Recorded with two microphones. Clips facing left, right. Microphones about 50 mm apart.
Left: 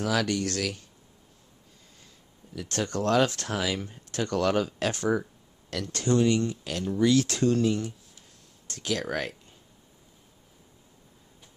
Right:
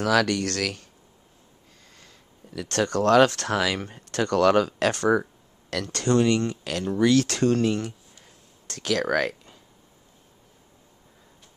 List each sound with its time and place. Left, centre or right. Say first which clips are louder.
0.0 s speech: right 5 dB; right
2.0 s a sound: right 4 dB; right
2.9 s speech: right 6 dB; right
3.3 s speech: right 6 dB; right
3.5 s speech: right 5 dB; right
6.6 s speech: right 3 dB; right
8.6 s speech: right 5 dB; right